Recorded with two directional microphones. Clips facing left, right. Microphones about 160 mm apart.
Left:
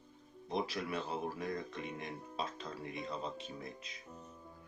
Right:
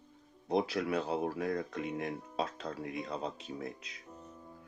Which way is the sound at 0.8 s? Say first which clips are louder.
Right 6 dB; 80° right.